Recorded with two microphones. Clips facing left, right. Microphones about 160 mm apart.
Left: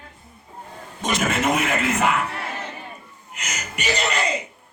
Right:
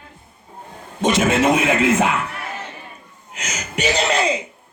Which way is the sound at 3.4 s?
90° right.